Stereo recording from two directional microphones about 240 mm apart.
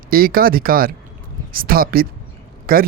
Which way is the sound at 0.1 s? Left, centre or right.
Right.